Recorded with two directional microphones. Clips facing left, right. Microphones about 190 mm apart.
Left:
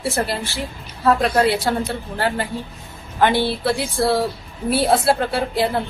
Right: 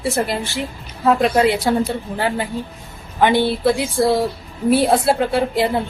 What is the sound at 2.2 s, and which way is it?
A woman's voice, 15° right (ahead or behind).